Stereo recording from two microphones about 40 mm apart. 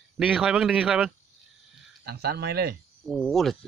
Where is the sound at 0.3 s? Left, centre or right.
Centre.